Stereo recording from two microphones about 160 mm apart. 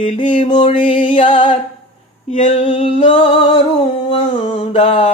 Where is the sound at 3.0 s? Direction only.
35° left (ahead or behind).